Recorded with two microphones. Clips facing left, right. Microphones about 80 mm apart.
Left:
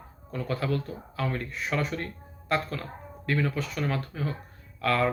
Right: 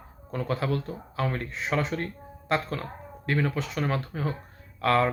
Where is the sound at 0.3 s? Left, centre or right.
Right.